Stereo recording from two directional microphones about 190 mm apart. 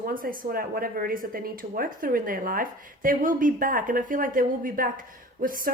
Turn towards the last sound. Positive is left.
turn(degrees=-50)  # may be behind; listen again after turning